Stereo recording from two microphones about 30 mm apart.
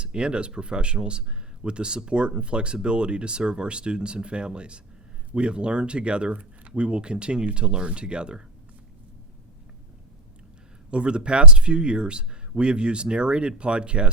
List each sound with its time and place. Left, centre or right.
0.0 s speech: right
6.3 s speech: right
6.8 s speech: right
10.9 s speech: right